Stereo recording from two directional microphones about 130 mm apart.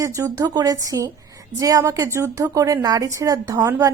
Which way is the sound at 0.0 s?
25° right (ahead or behind).